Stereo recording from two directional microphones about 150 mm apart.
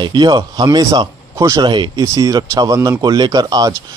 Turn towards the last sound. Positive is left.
turn(degrees=-25)  # may be behind; listen again after turning